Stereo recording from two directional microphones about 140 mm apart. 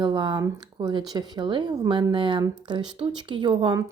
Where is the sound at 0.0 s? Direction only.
35° right (ahead or behind).